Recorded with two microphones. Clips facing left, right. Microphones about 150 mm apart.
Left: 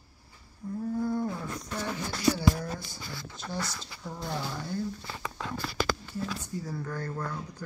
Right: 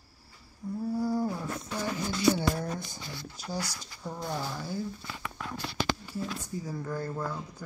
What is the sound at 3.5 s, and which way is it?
Speech, 15° right (ahead or behind).